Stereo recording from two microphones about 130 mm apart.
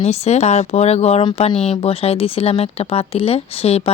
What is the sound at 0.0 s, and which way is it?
Speech, 55° left (ahead or behind).